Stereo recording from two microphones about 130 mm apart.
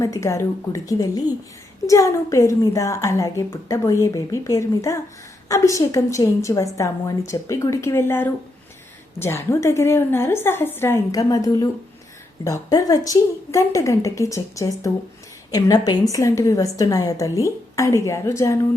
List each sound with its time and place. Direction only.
0.0 s a woman's voice: 25° left (ahead or behind)